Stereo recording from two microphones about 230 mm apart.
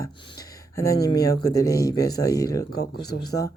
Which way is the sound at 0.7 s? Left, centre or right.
Centre.